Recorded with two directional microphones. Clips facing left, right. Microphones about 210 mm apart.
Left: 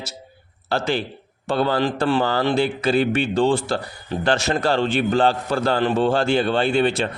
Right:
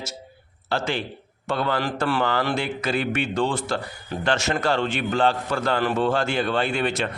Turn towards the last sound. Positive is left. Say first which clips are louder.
# left 5 dB
turn(degrees=30)  # may be behind; listen again after turning